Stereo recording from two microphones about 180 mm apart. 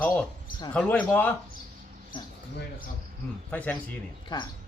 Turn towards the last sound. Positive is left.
turn(degrees=25)  # may be behind; listen again after turning